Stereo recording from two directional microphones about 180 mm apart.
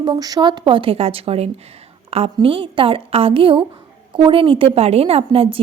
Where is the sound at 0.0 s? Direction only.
20° right (ahead or behind).